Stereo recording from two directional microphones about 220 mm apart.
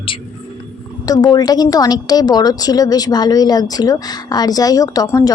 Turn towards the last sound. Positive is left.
turn(degrees=15)  # may be behind; listen again after turning